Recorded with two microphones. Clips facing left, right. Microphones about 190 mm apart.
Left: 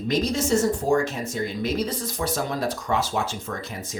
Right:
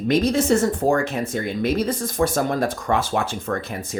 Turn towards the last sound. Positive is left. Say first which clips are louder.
# right 6 dB
turn(degrees=-55)  # may be behind; listen again after turning